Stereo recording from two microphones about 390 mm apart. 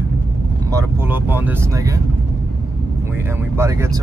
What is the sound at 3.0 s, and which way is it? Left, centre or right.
Speech, centre.